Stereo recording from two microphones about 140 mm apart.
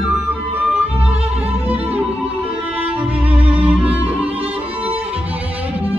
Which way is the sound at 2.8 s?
10° right (ahead or behind).